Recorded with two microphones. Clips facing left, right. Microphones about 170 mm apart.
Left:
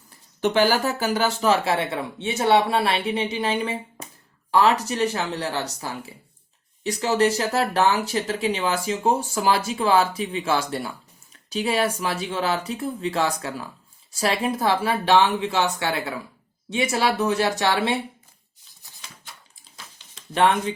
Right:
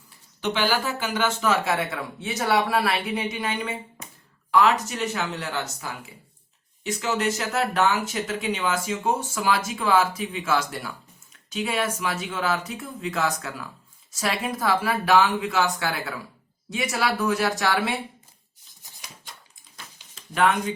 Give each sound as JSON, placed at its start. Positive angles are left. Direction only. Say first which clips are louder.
{"t": 0.4, "sound": "speech", "louder": "left 5 dB", "side_deg": 45}
{"t": 4.0, "sound": "a sound", "louder": "left 3 dB", "side_deg": 35}
{"t": 4.5, "sound": "speech", "louder": "left 1 dB", "side_deg": 35}